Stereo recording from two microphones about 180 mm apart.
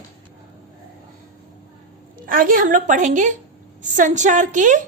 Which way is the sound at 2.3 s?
50° right (ahead or behind).